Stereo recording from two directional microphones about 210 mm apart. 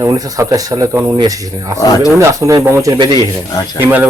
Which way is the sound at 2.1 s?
15° right (ahead or behind).